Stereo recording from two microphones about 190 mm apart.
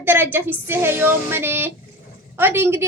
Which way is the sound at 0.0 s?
10° right (ahead or behind).